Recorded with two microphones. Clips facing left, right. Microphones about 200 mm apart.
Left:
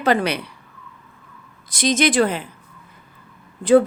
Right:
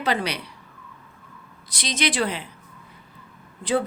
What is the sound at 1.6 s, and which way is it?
Speech, 50° left (ahead or behind).